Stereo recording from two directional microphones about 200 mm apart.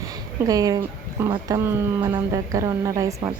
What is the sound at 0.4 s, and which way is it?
A woman's voice, 20° right (ahead or behind).